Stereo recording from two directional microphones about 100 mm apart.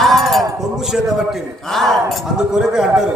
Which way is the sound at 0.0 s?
Centre (ahead or behind).